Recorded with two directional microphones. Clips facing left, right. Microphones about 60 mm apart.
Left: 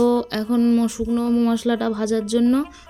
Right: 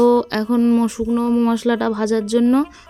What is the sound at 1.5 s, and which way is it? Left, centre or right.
Speech, right.